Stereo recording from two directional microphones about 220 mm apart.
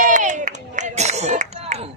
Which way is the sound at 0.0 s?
35° right (ahead or behind).